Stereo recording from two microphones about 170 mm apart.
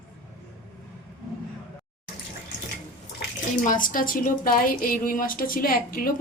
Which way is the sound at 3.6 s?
50° left (ahead or behind).